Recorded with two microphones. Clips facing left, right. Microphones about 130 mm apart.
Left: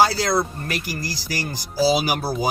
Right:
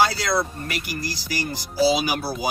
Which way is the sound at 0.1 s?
35° left (ahead or behind).